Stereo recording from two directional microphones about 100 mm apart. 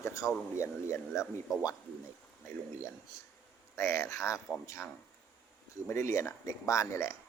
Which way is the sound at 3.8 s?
25° left (ahead or behind).